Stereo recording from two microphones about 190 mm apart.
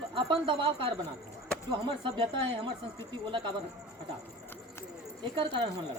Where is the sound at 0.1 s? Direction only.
25° right (ahead or behind).